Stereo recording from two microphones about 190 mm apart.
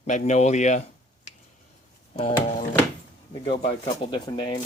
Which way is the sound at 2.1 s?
35° left (ahead or behind).